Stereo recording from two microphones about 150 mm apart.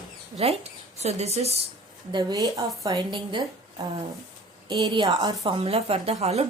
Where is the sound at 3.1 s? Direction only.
30° right (ahead or behind).